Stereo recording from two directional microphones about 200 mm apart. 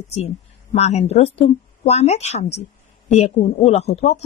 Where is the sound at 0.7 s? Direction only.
35° left (ahead or behind).